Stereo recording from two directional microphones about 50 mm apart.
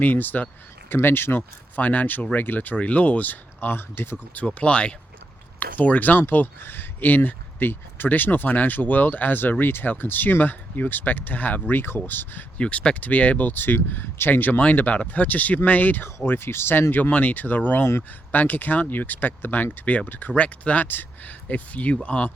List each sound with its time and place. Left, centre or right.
0.0 s speech: left
1.8 s speech: left
4.4 s speech: left
5.5 s speech: left
12.5 s speech: left
16.2 s speech: left
16.9 s speech: left